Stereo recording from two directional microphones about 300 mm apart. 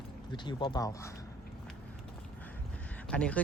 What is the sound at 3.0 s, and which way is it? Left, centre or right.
Speech, centre.